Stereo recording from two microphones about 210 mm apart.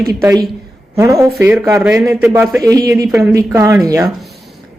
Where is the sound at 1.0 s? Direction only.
15° right (ahead or behind).